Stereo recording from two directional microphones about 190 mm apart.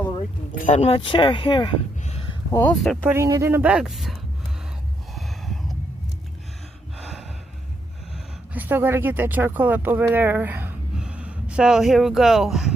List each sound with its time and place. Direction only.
0.2 s speech: 40° left (ahead or behind); by 1.7 s 25° left (ahead or behind)
2.5 s speech: 10° left (ahead or behind)
3.1 s a woman's voice: 15° right (ahead or behind); by 4.2 s centre (ahead or behind)
5.1 s a sound: centre (ahead or behind)
6.9 s gasp: centre (ahead or behind)
8.5 s speech: 10° right (ahead or behind)